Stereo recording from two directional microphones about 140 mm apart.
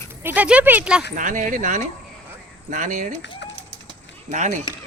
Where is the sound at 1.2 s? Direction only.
70° right (ahead or behind).